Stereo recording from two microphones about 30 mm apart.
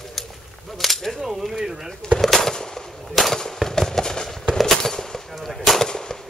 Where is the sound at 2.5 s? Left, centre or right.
Centre.